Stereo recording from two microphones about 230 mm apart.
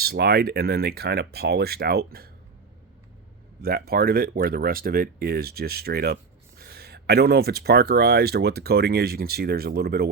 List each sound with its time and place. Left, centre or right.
0.0 s speech: right
3.6 s speech: right